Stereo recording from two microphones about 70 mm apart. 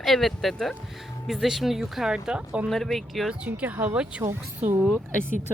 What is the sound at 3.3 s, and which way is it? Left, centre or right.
Speech, right.